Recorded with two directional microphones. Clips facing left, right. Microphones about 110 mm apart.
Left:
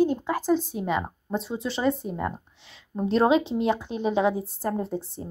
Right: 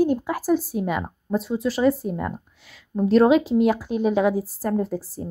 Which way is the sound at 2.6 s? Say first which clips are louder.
Right 1 dB; 25° left (ahead or behind).